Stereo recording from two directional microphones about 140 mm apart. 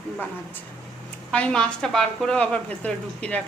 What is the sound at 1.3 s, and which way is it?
A woman's voice, 5° left (ahead or behind).